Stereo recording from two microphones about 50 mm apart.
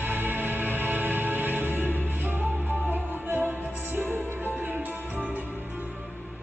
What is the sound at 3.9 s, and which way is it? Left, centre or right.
Music, right.